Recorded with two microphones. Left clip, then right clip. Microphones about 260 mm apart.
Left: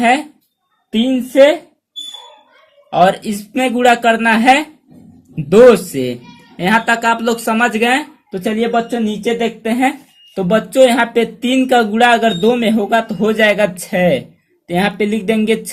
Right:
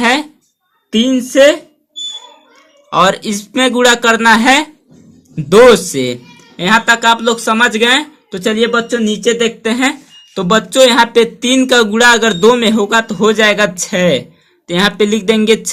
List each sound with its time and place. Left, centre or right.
0.0 s speech: right
3.2 s speech: right